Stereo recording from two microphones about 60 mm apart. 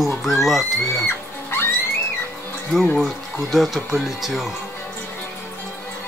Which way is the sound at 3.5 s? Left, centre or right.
Centre.